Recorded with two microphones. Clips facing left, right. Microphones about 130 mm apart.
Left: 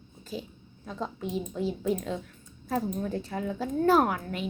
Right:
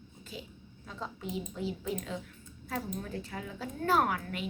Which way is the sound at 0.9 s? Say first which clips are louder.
Left 6 dB; 40° left (ahead or behind).